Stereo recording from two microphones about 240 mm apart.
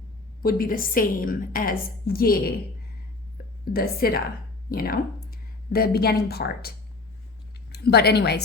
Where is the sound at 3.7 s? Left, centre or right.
Left.